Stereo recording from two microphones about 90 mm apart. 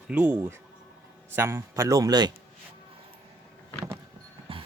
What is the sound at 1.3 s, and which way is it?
Speech, 30° right (ahead or behind).